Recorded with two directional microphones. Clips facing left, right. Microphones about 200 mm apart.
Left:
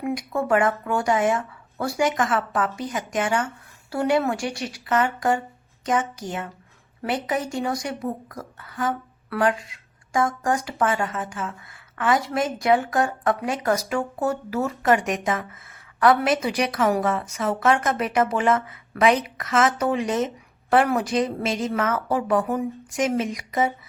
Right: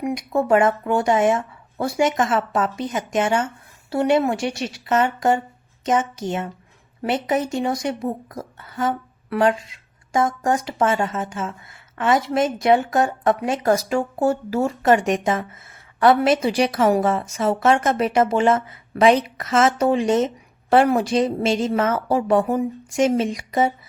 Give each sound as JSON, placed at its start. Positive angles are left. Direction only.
{"t": 0.0, "sound": "a woman's voice", "side_deg": -20}